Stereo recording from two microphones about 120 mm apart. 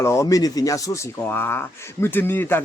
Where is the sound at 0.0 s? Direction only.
25° left (ahead or behind).